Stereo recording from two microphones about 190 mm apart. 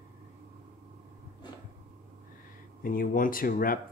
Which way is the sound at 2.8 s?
45° left (ahead or behind).